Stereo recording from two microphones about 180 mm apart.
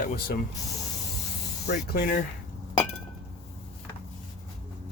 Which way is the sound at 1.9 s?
55° left (ahead or behind).